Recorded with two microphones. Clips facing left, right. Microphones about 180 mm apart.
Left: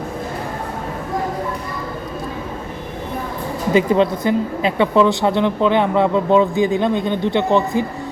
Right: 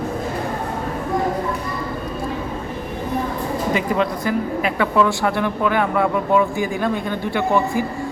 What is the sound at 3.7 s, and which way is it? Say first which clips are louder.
Speech: left 8 dB; 25° left (ahead or behind).